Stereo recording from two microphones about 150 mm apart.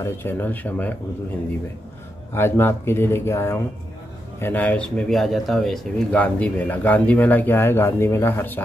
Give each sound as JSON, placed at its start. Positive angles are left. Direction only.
{"t": 0.0, "sound": "speech", "side_deg": 15}
{"t": 2.3, "sound": "speech", "side_deg": 15}